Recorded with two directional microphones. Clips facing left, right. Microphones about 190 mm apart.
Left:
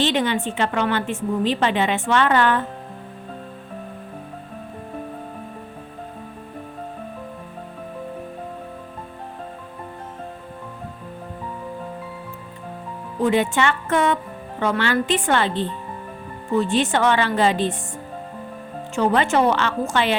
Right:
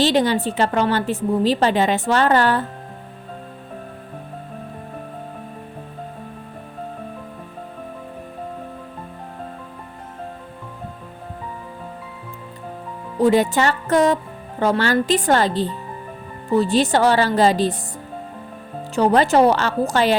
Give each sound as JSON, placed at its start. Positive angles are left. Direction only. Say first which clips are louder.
{"t": 0.0, "sound": "a woman's voice", "louder": "right 3 dB", "side_deg": -35}
{"t": 13.1, "sound": "a woman's voice", "louder": "right 3 dB", "side_deg": -35}
{"t": 18.9, "sound": "a woman's voice", "louder": "right 4 dB", "side_deg": -35}